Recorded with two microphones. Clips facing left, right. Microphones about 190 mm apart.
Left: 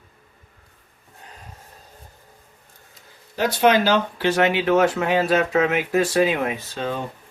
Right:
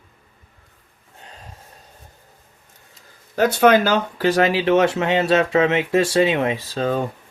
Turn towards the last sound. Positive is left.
turn(degrees=-40)  # may be behind; listen again after turning